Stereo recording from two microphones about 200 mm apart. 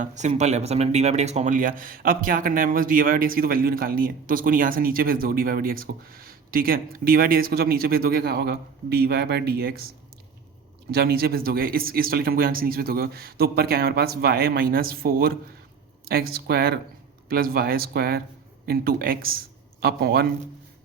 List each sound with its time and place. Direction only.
0.0 s speech: 35° right (ahead or behind)
10.9 s a man's voice: 50° right (ahead or behind)